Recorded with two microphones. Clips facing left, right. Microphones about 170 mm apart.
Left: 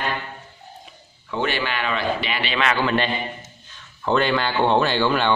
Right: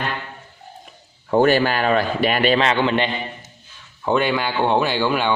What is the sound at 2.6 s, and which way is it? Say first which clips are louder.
A man's voice: right 2 dB; 25° right (ahead or behind).